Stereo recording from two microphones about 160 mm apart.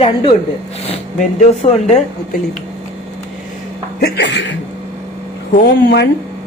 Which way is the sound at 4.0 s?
90° left.